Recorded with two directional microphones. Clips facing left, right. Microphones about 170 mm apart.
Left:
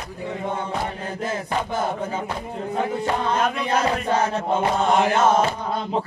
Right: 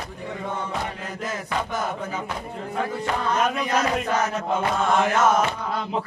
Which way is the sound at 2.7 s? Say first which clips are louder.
Left 3 dB; 30° left (ahead or behind).